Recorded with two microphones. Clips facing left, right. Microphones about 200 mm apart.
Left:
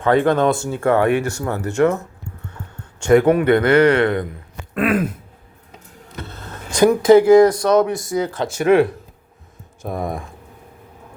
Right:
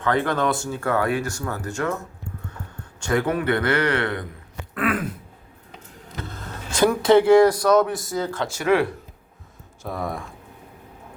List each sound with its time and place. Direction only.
0.0 s a man's voice: 25° left (ahead or behind)
3.0 s a man's voice: 25° left (ahead or behind)
4.7 s throat clearing: 25° left (ahead or behind)
6.7 s speech: 15° left (ahead or behind)
7.4 s a man's voice: 25° left (ahead or behind)